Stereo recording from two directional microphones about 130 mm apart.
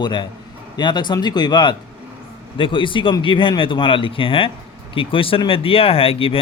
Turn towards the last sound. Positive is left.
turn(degrees=45)  # may be behind; listen again after turning